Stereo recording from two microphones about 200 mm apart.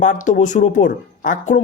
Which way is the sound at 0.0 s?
40° left (ahead or behind).